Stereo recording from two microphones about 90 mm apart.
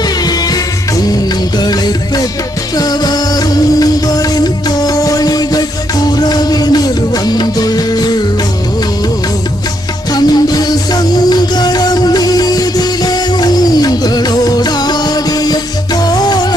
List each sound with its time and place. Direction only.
0.3 s music: 45° left (ahead or behind)
10.1 s music: 45° left (ahead or behind)